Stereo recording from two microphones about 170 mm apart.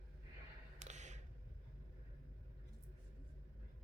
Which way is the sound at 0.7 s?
45° right (ahead or behind).